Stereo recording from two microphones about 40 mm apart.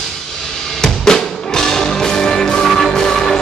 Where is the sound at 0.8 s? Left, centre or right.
Centre.